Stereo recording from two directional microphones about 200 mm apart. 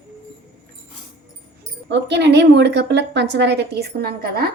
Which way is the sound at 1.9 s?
60° right (ahead or behind).